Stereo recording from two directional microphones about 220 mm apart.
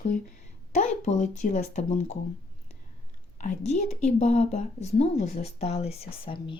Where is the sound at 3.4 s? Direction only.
30° left (ahead or behind).